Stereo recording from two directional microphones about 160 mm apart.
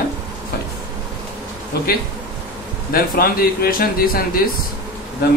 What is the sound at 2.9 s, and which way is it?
Speech, 70° left (ahead or behind).